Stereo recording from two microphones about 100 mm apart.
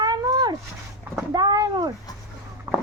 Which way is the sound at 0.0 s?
45° right (ahead or behind).